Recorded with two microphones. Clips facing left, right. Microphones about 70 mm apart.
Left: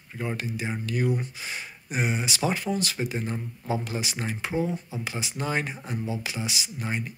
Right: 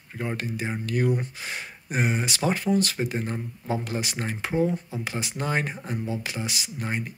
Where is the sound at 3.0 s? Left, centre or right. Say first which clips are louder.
Right 1 dB; right.